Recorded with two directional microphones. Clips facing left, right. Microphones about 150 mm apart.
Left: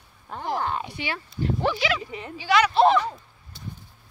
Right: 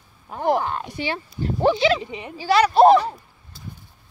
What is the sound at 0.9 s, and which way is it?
Speech, 30° right (ahead or behind).